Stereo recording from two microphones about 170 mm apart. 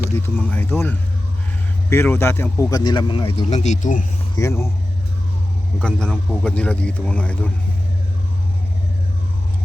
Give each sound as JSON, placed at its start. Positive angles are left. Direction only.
{"t": 0.0, "sound": "a man's voice", "side_deg": 15}
{"t": 4.4, "sound": "a man's voice", "side_deg": 15}
{"t": 5.8, "sound": "a man's voice", "side_deg": 5}